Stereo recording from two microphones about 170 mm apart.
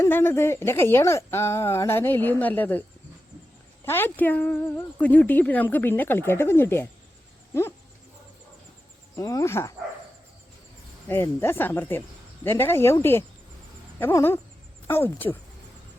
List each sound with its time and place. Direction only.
0.0 s speech: 15° left (ahead or behind)
3.8 s speech: 10° left (ahead or behind)
9.1 s speech: 20° left (ahead or behind)
11.1 s speech: 15° left (ahead or behind)